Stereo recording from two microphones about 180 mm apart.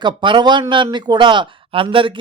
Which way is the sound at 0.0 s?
25° right (ahead or behind).